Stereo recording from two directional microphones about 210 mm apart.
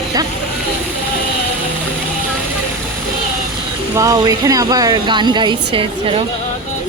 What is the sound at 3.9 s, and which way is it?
Speech, 15° right (ahead or behind).